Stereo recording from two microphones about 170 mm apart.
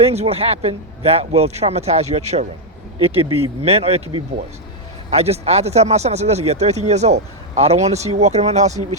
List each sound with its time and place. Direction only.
0.0 s speech: 40° right (ahead or behind)
5.1 s speech: 40° right (ahead or behind)